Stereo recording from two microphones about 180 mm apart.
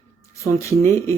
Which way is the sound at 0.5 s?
15° left (ahead or behind).